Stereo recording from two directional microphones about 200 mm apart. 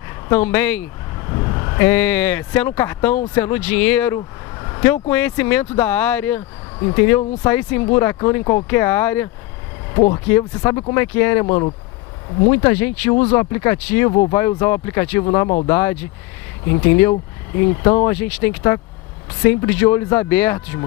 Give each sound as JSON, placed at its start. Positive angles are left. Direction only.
{"t": 0.3, "sound": "speech", "side_deg": 10}
{"t": 1.2, "sound": "speech", "side_deg": 20}
{"t": 6.8, "sound": "speech", "side_deg": 20}
{"t": 9.9, "sound": "speech", "side_deg": 25}
{"t": 10.2, "sound": "speech", "side_deg": 15}
{"t": 11.4, "sound": "speech", "side_deg": 25}
{"t": 12.4, "sound": "speech", "side_deg": 15}
{"t": 15.2, "sound": "speech", "side_deg": 25}